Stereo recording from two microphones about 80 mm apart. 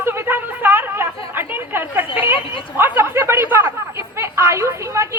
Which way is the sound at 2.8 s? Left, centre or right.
Right.